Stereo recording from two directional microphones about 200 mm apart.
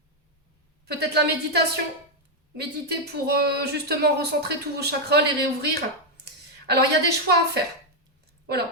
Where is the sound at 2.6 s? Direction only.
55° right (ahead or behind).